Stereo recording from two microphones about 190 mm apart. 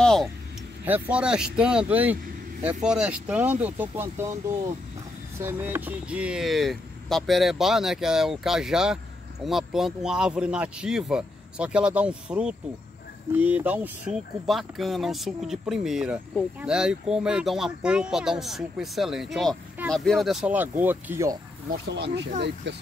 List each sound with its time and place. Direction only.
0.0 s a sound: centre (ahead or behind)
0.8 s speech: 10° right (ahead or behind)
21.9 s speech: 65° right (ahead or behind)